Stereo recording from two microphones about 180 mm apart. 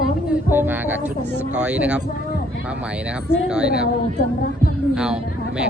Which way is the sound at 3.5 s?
5° right (ahead or behind).